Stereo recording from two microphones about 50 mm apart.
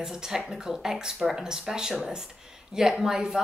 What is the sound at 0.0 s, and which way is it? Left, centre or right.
Speech, centre.